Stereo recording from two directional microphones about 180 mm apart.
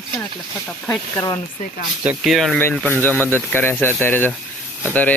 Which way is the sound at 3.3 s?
10° left (ahead or behind).